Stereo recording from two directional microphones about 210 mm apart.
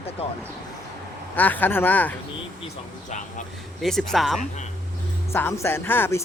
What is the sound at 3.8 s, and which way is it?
Speech, centre (ahead or behind).